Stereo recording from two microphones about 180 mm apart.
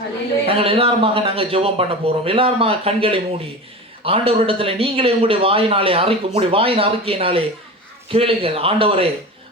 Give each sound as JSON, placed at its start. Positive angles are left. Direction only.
{"t": 0.4, "sound": "a man's voice", "side_deg": -30}